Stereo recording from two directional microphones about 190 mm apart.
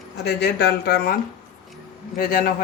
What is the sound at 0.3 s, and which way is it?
Speech, 60° left (ahead or behind).